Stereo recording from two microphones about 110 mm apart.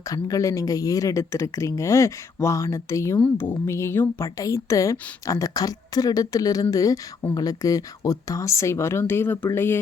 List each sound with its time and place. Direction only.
0.3 s a woman's voice: 30° left (ahead or behind)